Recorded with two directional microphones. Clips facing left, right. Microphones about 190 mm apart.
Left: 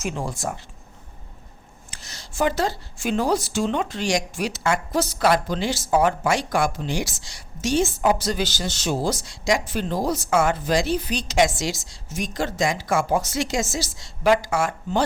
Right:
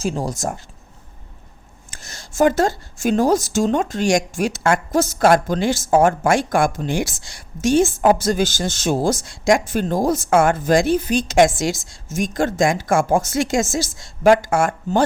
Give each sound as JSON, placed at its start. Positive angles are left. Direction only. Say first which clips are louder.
{"t": 0.0, "sound": "speech", "louder": "right 5 dB", "side_deg": -35}
{"t": 1.9, "sound": "speech", "louder": "right 3 dB", "side_deg": -50}